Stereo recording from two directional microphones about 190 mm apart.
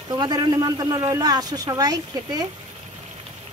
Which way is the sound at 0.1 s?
20° right (ahead or behind).